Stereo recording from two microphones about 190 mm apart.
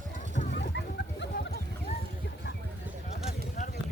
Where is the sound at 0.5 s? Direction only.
65° left (ahead or behind).